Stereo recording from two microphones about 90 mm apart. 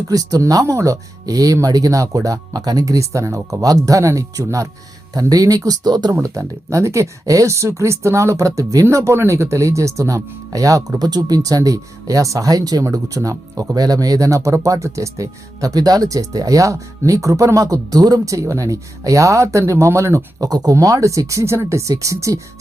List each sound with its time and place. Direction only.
0.1 s speech: 45° right (ahead or behind)
6.1 s speech: 35° right (ahead or behind)